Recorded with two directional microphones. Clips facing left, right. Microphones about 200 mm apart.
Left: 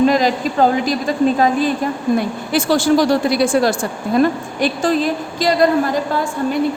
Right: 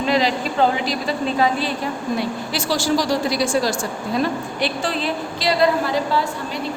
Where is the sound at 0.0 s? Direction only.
45° left (ahead or behind).